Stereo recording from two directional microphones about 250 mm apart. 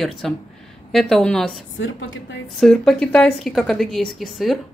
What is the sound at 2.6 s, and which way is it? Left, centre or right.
Speech, centre.